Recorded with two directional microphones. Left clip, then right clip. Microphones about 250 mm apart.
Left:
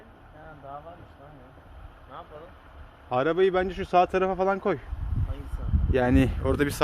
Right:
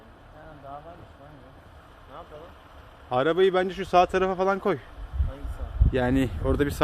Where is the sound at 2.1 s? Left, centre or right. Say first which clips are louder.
Left 1 dB; centre.